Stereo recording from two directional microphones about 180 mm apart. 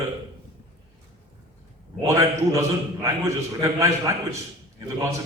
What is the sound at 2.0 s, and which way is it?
A man's voice, 15° right (ahead or behind).